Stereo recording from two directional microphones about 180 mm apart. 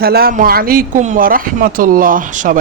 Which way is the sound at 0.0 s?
60° right (ahead or behind).